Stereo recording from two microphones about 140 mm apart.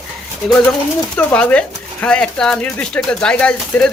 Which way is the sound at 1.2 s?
10° left (ahead or behind).